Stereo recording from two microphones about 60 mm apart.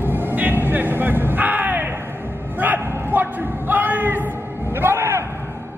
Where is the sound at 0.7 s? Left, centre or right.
Right.